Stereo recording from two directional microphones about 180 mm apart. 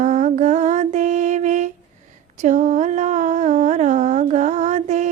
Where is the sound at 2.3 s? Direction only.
40° right (ahead or behind).